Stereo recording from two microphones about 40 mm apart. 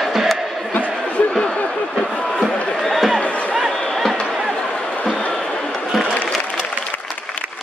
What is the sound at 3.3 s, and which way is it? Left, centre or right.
Music, left.